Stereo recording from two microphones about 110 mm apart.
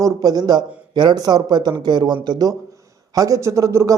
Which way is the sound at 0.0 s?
35° right (ahead or behind).